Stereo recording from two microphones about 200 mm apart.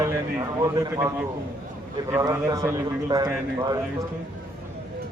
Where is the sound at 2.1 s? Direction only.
15° right (ahead or behind).